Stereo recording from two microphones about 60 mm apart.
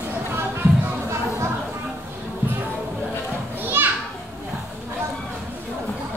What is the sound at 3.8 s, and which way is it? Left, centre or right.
Children playing, right.